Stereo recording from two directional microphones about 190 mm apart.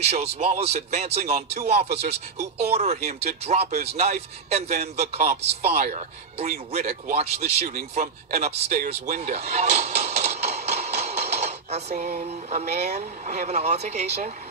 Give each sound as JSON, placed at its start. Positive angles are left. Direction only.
{"t": 0.1, "sound": "a man's voice", "side_deg": -35}